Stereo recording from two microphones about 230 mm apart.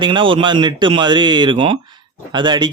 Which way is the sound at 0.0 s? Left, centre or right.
Right.